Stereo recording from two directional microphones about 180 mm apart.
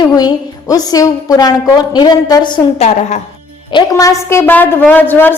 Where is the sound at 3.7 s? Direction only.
20° left (ahead or behind).